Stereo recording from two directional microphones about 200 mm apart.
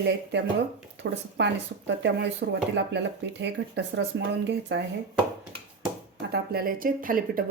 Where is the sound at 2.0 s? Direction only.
60° right (ahead or behind).